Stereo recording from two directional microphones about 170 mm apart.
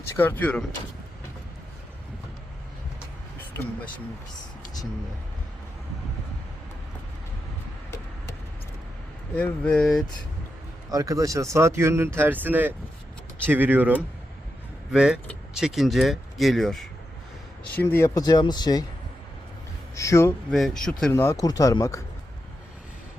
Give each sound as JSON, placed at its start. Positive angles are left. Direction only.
{"t": 0.2, "sound": "speech", "side_deg": 10}
{"t": 9.3, "sound": "speech", "side_deg": 5}
{"t": 10.9, "sound": "speech", "side_deg": -20}
{"t": 17.7, "sound": "speech", "side_deg": 15}
{"t": 20.0, "sound": "speech", "side_deg": 15}
{"t": 20.5, "sound": "speech", "side_deg": 0}
{"t": 21.1, "sound": "speech", "side_deg": 15}